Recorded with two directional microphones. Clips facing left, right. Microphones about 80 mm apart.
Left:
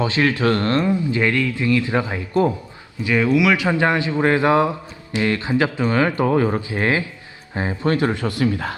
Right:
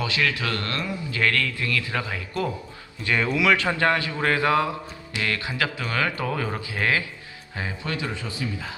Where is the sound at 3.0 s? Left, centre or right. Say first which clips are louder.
Left 6 dB; centre; by 8.7 s left.